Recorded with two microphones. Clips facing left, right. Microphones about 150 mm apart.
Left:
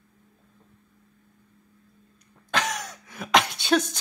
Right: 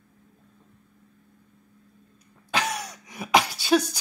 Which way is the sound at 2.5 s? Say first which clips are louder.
Even; 5° right (ahead or behind).